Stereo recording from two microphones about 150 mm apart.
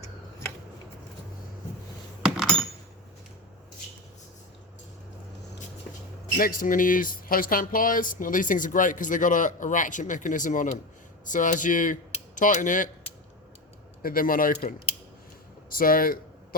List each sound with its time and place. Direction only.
2.2 s glass: centre (ahead or behind)
6.3 s speech: 70° left (ahead or behind)
14.0 s speech: 70° left (ahead or behind)